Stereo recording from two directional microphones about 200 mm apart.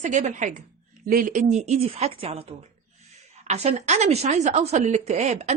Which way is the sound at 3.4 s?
35° right (ahead or behind).